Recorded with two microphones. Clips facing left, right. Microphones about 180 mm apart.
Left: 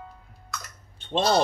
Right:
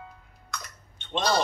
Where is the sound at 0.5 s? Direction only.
Centre (ahead or behind).